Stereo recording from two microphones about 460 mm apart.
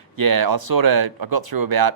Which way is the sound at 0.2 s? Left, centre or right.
Right.